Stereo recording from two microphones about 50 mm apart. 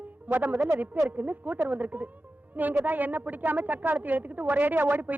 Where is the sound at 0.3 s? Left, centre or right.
Right.